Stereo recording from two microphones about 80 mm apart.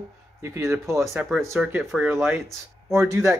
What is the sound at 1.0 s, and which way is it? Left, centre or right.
Speech, centre.